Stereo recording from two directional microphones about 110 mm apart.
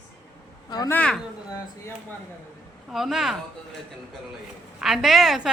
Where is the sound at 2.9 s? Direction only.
Centre (ahead or behind).